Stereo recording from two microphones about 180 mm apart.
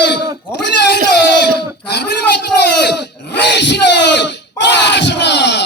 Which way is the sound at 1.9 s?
65° left (ahead or behind).